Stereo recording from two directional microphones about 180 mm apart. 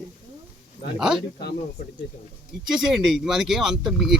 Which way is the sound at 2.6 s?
Centre (ahead or behind).